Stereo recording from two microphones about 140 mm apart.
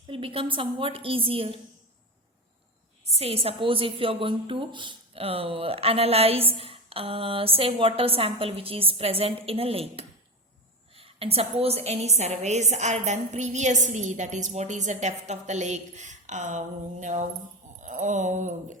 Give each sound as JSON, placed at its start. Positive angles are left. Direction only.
{"t": 0.1, "sound": "a woman's voice", "side_deg": -40}
{"t": 3.0, "sound": "a woman's voice", "side_deg": -45}